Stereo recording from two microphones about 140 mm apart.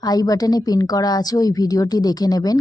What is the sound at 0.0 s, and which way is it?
A woman's voice, 25° left (ahead or behind).